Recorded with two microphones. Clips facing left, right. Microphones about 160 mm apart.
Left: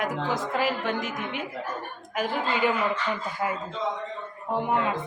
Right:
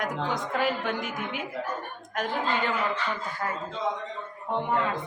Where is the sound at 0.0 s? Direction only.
5° left (ahead or behind).